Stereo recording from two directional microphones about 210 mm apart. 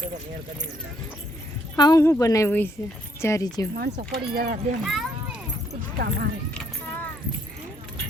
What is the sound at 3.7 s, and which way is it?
Speech, 50° right (ahead or behind).